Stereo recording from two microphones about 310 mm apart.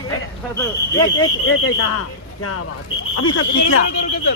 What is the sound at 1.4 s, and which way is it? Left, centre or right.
Speech, left.